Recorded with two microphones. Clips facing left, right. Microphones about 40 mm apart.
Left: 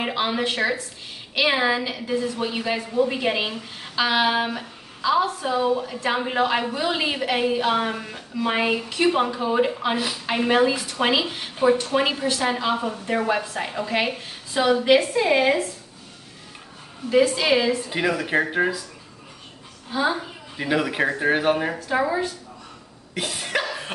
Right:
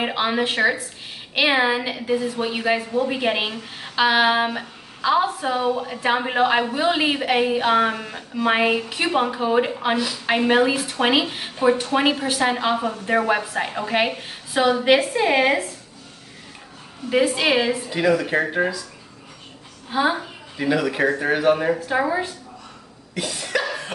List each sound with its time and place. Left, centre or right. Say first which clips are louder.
0.0 s a woman's voice: right 2 dB; centre
17.1 s a woman's voice: even; right
17.8 s speech: right 4 dB; centre
19.9 s a woman's voice: right 2 dB; right
20.5 s a man's voice: right 2 dB; centre
21.7 s a woman's voice: right 1 dB; centre
23.1 s a man's voice: right 1 dB; left